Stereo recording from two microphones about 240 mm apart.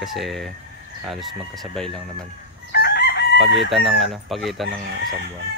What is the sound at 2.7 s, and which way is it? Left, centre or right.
Chicken, left.